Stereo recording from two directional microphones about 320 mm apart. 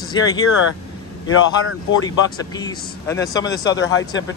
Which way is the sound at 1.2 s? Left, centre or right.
Left.